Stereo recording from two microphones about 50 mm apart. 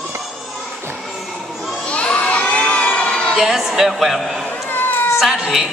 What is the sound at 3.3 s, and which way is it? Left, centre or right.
Speech, centre.